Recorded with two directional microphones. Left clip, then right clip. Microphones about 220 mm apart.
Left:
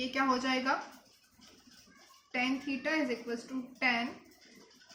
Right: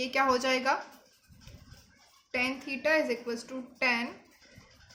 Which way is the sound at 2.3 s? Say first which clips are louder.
Right 2 dB; 45° right (ahead or behind).